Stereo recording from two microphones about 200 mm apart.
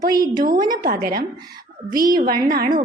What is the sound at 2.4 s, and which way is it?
Speech, 45° right (ahead or behind).